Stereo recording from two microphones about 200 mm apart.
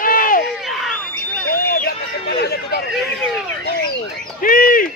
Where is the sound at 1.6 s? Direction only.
50° left (ahead or behind).